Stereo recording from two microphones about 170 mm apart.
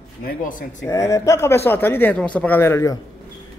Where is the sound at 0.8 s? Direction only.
20° left (ahead or behind).